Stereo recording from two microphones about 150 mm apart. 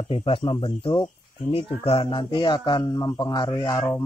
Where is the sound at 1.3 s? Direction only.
40° left (ahead or behind); by 4.0 s 20° left (ahead or behind).